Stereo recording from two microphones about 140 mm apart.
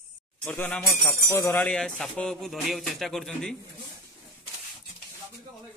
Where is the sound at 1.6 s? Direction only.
5° left (ahead or behind).